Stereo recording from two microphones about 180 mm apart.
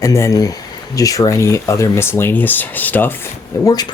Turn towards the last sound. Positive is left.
turn(degrees=15)  # may be behind; listen again after turning